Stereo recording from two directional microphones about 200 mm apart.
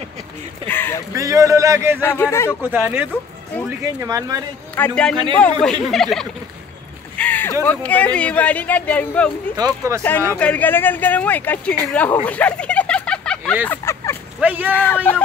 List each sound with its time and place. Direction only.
0.7 s speech: 10° left (ahead or behind)
1.1 s speech: 15° right (ahead or behind)
2.0 s speech: 10° left (ahead or behind)
2.7 s speech: 10° right (ahead or behind)
4.0 s speech: 20° right (ahead or behind)
4.7 s speech: 5° left (ahead or behind)
7.2 s a sound: 10° left (ahead or behind)
7.6 s speech: 5° left (ahead or behind)
9.6 s speech: 15° right (ahead or behind)
10.0 s speech: 10° left (ahead or behind)
12.3 s a sound: 5° left (ahead or behind)
14.4 s speech: 10° right (ahead or behind)
14.7 s speech: 10° left (ahead or behind)